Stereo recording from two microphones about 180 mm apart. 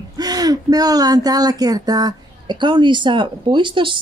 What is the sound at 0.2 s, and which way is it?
Speech, 20° right (ahead or behind).